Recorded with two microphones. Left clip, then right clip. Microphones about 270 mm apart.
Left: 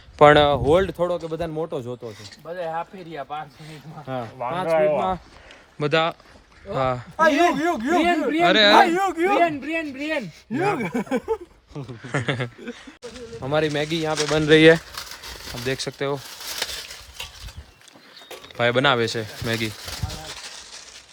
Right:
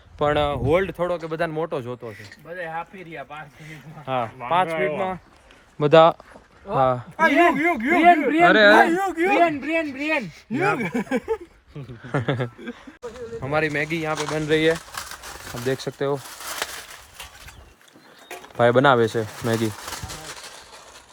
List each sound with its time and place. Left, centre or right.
0.2 s speech: left
0.6 s a man's voice: centre
4.0 s speech: centre
4.8 s speech: left
5.8 s a man's voice: centre
8.2 s a man's voice: centre
14.3 s speech: left
15.6 s speech: centre
18.5 s speech: centre